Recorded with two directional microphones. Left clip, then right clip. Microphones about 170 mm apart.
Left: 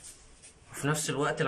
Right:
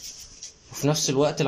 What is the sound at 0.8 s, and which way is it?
Speech, 20° right (ahead or behind).